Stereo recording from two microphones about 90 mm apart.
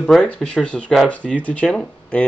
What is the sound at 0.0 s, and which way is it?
Speech, 5° left (ahead or behind).